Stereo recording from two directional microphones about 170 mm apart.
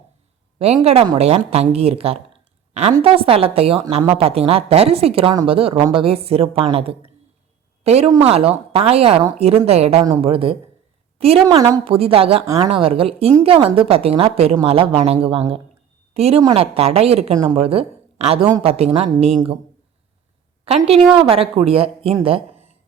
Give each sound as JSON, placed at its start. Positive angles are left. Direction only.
{"t": 0.6, "sound": "a woman's voice", "side_deg": -40}
{"t": 20.7, "sound": "a woman's voice", "side_deg": -35}